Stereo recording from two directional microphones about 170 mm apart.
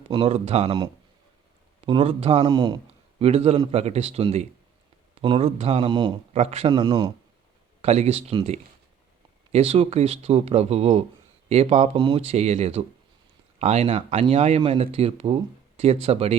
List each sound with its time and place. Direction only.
0.1 s speech: 30° right (ahead or behind)
1.8 s speech: 30° right (ahead or behind)
2.5 s speech: 25° right (ahead or behind)
3.2 s speech: 35° right (ahead or behind)
6.7 s speech: 25° right (ahead or behind)
7.8 s speech: 40° right (ahead or behind)